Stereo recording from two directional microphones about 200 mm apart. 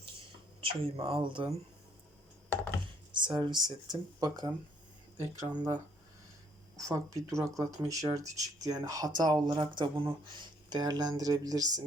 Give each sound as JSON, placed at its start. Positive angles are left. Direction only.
{"t": 0.6, "sound": "speech", "side_deg": -25}
{"t": 3.1, "sound": "speech", "side_deg": -25}